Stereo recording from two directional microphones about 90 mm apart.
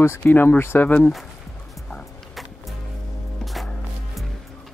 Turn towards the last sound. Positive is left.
turn(degrees=0)  # may be behind; listen again after turning